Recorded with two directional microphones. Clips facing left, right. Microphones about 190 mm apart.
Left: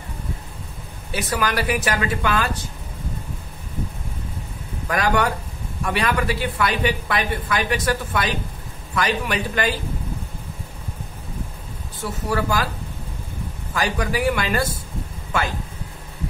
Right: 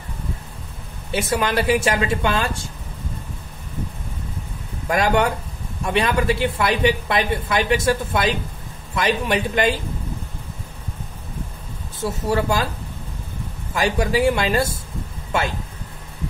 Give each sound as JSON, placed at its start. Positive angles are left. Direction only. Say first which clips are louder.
{"t": 1.1, "sound": "speech", "louder": "right 3 dB", "side_deg": -25}
{"t": 4.8, "sound": "speech", "louder": "right 2 dB", "side_deg": -25}
{"t": 12.0, "sound": "speech", "louder": "right 3 dB", "side_deg": -25}
{"t": 13.7, "sound": "speech", "louder": "right 4 dB", "side_deg": -25}